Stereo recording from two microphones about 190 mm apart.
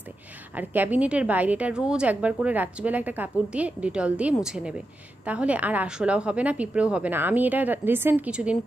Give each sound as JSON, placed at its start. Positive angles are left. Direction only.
{"t": 0.6, "sound": "a woman's voice", "side_deg": -10}